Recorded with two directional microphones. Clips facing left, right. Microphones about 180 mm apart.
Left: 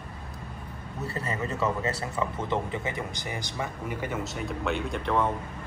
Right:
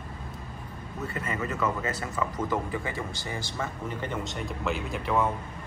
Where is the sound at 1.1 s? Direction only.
35° left (ahead or behind); by 5.2 s 5° right (ahead or behind).